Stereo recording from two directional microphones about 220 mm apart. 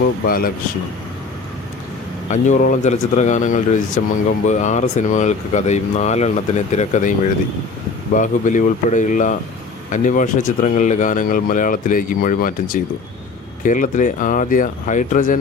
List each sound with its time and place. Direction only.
0.3 s speech: 40° left (ahead or behind)
2.3 s speech: 35° left (ahead or behind)
8.1 s speech: 35° left (ahead or behind)